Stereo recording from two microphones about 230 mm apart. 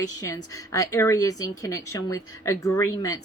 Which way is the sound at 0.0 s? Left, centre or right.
Centre.